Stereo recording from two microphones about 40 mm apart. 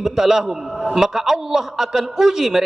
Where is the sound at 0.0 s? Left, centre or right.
Centre.